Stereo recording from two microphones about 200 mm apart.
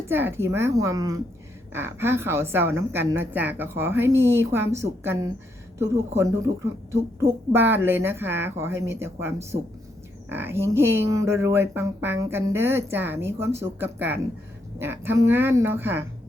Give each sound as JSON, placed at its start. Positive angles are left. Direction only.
{"t": 0.1, "sound": "speech", "side_deg": -10}